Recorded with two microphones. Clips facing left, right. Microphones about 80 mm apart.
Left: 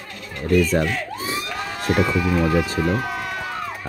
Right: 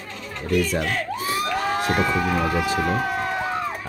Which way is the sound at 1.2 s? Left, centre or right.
Left.